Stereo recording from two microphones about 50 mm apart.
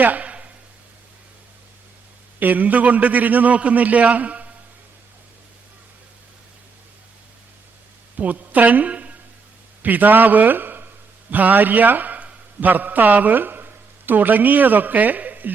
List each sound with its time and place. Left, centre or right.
0.0 s a sound: right
2.4 s a man's voice: right
8.1 s a woman's voice: right
9.8 s a man's voice: right